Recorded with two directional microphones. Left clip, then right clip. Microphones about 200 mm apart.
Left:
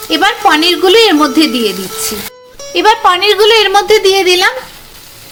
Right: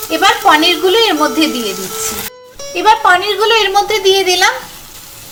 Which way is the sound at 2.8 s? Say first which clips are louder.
Left 1 dB; 50° left (ahead or behind).